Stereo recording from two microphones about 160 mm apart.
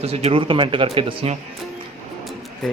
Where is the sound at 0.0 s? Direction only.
40° right (ahead or behind).